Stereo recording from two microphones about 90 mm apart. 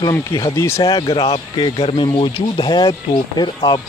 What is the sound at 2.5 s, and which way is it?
Speech, 55° left (ahead or behind).